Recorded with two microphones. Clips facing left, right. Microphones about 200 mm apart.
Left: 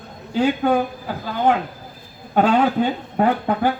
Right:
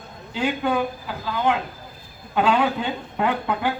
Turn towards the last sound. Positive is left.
turn(degrees=40)  # may be behind; listen again after turning